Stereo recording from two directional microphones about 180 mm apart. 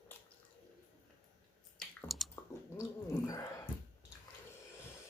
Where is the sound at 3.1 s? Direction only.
15° left (ahead or behind).